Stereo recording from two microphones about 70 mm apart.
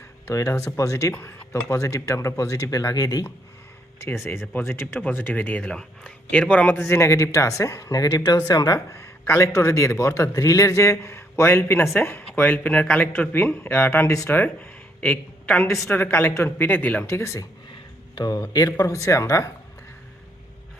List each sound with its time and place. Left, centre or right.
0.3 s a man's voice: left
1.1 s a man's voice: left
4.5 s speech: left
5.6 s speech: centre
6.7 s a man's voice: left
8.7 s a man's voice: left; by 15.6 s centre
15.7 s speech: left
17.1 s a man's voice: left
17.7 s a sound: left
18.3 s a man's voice: left
18.9 s a man's voice: left